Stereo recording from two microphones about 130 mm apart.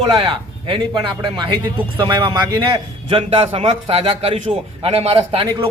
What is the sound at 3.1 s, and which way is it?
A man's voice, 50° right (ahead or behind).